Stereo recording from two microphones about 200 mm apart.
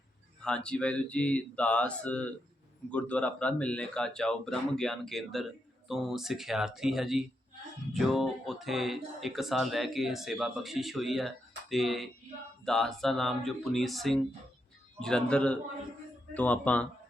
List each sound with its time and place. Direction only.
0.4 s speech: 5° left (ahead or behind)